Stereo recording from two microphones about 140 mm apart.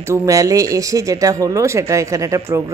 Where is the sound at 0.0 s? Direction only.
20° right (ahead or behind).